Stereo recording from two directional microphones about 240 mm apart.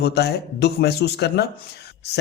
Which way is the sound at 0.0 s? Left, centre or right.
Left.